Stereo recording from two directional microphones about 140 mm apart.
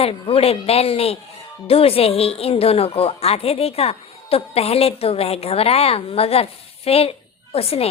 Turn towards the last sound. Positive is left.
turn(degrees=45)  # may be behind; listen again after turning